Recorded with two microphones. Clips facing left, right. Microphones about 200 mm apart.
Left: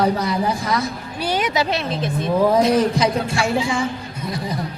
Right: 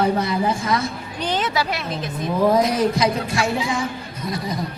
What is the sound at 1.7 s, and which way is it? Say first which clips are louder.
A woman's voice: left 4 dB; 30° left (ahead or behind).